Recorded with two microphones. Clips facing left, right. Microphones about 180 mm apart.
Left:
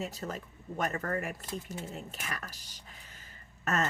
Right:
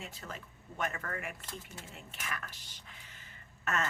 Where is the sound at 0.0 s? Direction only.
40° left (ahead or behind).